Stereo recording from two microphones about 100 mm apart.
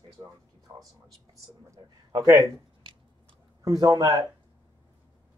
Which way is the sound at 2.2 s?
30° right (ahead or behind).